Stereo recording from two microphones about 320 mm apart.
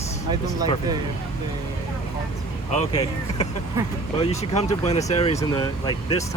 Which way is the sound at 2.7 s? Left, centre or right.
Centre.